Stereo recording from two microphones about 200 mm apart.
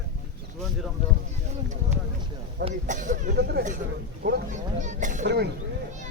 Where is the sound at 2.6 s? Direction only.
35° right (ahead or behind).